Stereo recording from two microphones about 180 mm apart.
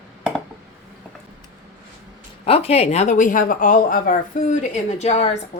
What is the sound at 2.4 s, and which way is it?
Speech, 35° left (ahead or behind).